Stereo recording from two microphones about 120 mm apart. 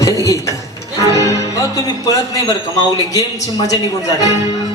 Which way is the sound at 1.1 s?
25° left (ahead or behind).